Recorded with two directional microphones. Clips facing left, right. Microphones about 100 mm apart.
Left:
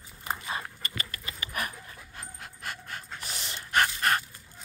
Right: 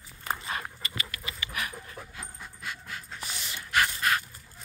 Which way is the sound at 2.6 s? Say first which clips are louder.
Left 1 dB; 50° left (ahead or behind).